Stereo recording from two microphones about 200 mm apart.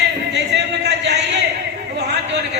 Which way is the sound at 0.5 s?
60° right (ahead or behind).